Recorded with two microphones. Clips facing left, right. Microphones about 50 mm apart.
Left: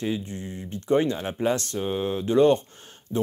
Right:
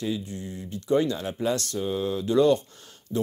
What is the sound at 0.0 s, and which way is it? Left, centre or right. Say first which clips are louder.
Speech: left 1 dB; left.